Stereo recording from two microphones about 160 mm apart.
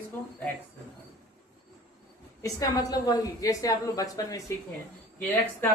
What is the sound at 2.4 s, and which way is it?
A woman's voice, 20° left (ahead or behind).